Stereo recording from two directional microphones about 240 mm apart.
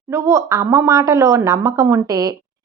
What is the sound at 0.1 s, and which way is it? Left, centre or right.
A woman's voice, centre.